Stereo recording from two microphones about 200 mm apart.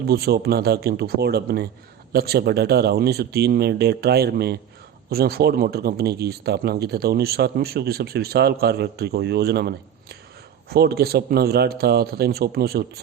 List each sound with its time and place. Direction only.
0.1 s speech: 50° right (ahead or behind)